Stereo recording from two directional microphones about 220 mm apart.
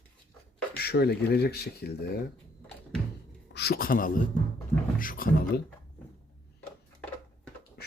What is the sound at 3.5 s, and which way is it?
A man's voice, 45° left (ahead or behind).